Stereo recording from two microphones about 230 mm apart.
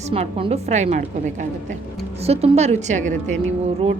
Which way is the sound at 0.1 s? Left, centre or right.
Right.